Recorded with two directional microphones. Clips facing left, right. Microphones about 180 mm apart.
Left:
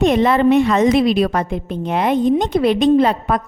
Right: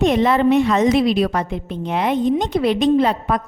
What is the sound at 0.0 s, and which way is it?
A woman's voice, 55° left (ahead or behind).